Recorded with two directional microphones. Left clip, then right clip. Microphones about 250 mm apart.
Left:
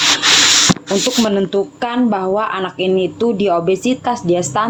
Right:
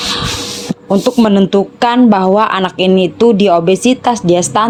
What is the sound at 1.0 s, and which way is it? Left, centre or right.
A woman's voice, right.